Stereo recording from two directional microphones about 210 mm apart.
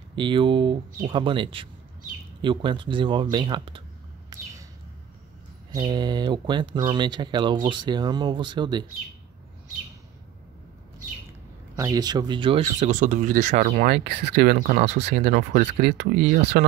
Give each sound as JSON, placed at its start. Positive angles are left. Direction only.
{"t": 0.1, "sound": "speech", "side_deg": -25}
{"t": 5.8, "sound": "speech", "side_deg": -20}
{"t": 11.7, "sound": "speech", "side_deg": -15}